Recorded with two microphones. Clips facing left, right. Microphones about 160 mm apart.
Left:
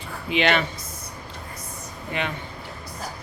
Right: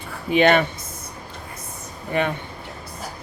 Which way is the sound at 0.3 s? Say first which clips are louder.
Right 6 dB; 45° right (ahead or behind).